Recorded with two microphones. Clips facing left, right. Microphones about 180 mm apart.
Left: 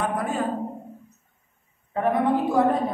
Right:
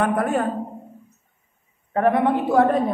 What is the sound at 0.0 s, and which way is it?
Speech, 60° right (ahead or behind).